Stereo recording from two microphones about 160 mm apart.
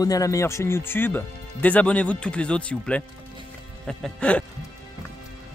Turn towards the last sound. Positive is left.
turn(degrees=5)  # may be behind; listen again after turning